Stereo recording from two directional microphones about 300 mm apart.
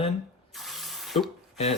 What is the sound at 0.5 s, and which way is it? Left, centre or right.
Spray, centre.